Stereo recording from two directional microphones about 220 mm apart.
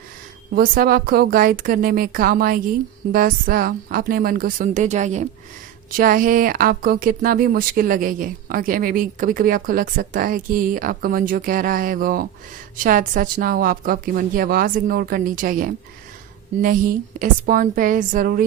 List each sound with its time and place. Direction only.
0.5 s speech: 40° right (ahead or behind)
17.2 s speech: 40° right (ahead or behind)